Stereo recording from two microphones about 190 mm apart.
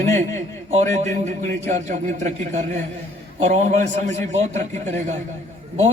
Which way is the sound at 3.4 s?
35° right (ahead or behind).